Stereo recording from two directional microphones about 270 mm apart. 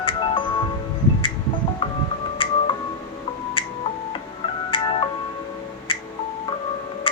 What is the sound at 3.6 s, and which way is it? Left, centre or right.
Music, centre.